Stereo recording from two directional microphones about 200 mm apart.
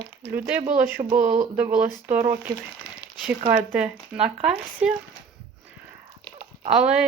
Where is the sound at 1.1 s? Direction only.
40° right (ahead or behind).